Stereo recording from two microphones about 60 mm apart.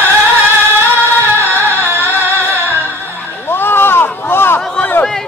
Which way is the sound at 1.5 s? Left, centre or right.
Left.